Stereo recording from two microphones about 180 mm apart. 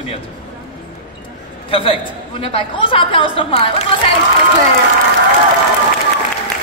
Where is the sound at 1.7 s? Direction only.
30° left (ahead or behind).